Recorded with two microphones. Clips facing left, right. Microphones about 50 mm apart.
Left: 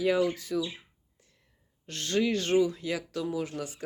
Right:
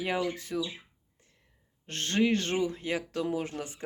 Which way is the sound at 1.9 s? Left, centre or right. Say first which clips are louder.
Right 1 dB; right.